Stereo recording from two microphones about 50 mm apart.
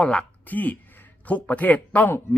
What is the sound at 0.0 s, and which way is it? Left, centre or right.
Speech, centre.